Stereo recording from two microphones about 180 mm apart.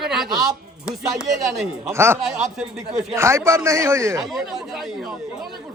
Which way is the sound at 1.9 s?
15° right (ahead or behind).